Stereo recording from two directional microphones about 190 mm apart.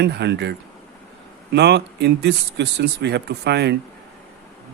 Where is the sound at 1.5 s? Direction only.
65° right (ahead or behind).